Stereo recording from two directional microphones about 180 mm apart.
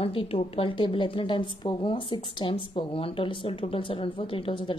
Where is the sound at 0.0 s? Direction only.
30° left (ahead or behind).